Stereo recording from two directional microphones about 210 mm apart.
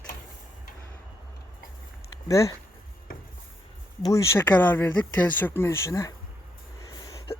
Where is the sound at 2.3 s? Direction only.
15° left (ahead or behind).